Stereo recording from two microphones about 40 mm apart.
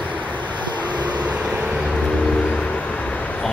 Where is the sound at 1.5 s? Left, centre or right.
Centre.